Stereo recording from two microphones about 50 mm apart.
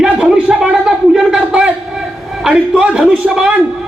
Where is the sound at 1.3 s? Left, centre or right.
Right.